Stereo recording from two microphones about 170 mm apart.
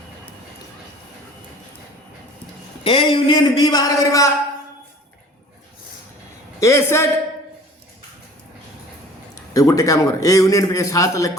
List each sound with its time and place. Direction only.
2.8 s a man's voice: 30° left (ahead or behind)
6.6 s a man's voice: 15° left (ahead or behind)
9.5 s a man's voice: 20° left (ahead or behind)